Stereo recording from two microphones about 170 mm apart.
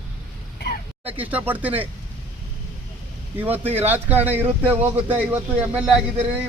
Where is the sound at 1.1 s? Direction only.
10° right (ahead or behind).